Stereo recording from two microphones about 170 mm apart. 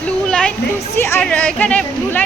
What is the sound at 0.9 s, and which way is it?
A woman's voice, 15° left (ahead or behind).